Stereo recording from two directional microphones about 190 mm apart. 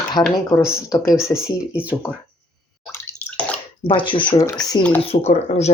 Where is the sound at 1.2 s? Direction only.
15° left (ahead or behind).